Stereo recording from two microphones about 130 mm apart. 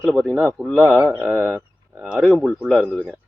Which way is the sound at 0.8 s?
10° right (ahead or behind).